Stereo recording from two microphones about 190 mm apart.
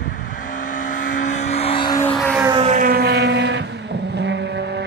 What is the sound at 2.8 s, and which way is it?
Vehicle, 55° right (ahead or behind).